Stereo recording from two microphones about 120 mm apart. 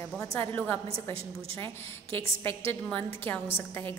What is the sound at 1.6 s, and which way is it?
Speech, 50° right (ahead or behind).